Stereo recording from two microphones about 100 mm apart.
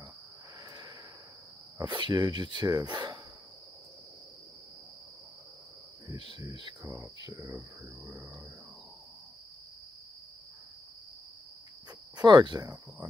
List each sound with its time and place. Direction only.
1.9 s speech: 55° right (ahead or behind)
6.1 s insect: 50° right (ahead or behind)
6.8 s speech: 35° right (ahead or behind)
12.2 s speech: 40° right (ahead or behind)